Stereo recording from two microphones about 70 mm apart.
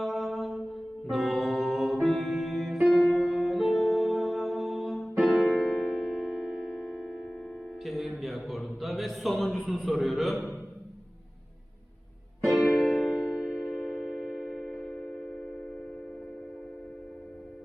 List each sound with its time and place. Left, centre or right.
0.0 s music: centre
8.4 s a sound: centre
9.5 s a man's voice: centre
12.5 s music: centre